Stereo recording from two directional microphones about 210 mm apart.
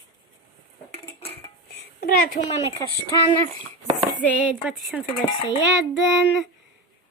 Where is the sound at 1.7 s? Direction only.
45° left (ahead or behind).